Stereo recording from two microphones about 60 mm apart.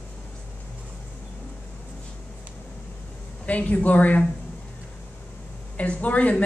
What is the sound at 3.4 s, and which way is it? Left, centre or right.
Speech, left.